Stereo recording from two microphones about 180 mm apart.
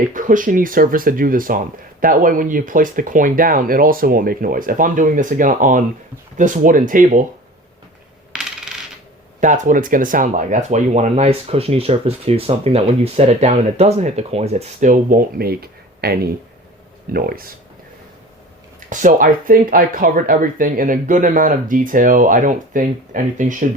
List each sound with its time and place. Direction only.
0.1 s speech: 45° right (ahead or behind)
8.3 s coin: 5° right (ahead or behind)
9.4 s speech: 45° right (ahead or behind)
18.9 s speech: 50° right (ahead or behind)